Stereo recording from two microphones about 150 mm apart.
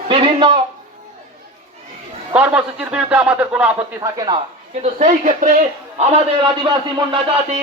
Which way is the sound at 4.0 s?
25° right (ahead or behind).